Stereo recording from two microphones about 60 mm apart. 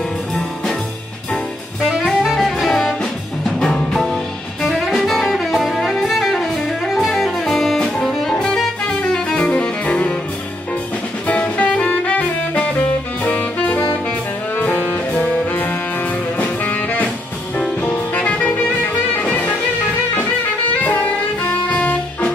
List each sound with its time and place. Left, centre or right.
2.1 s music: centre; by 10.1 s left
11.2 s music: left
13.2 s saxophone: left
14.5 s music: left
17.6 s jazz: centre
21.5 s music: left